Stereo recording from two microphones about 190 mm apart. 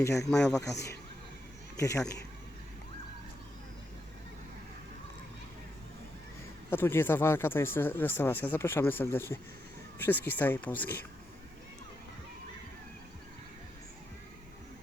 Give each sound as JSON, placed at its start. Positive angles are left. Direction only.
{"t": 0.0, "sound": "speech", "side_deg": 15}
{"t": 0.3, "sound": "speech", "side_deg": 5}
{"t": 1.8, "sound": "speech", "side_deg": 15}
{"t": 6.7, "sound": "speech", "side_deg": 10}